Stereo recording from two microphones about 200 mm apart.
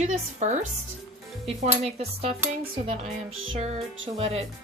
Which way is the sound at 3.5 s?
35° right (ahead or behind).